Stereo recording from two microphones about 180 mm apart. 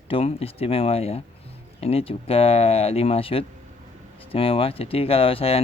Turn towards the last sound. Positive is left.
turn(degrees=30)  # may be behind; listen again after turning